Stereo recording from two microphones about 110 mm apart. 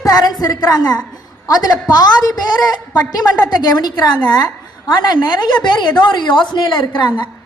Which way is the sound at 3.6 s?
40° left (ahead or behind).